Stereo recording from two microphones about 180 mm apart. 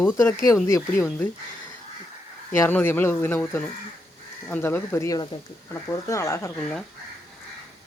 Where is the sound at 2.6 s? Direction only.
10° left (ahead or behind).